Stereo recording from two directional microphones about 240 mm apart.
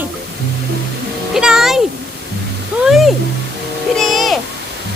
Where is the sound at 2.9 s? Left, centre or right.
Centre.